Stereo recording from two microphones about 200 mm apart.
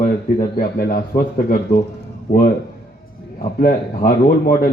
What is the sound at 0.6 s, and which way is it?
A man's voice, 45° left (ahead or behind).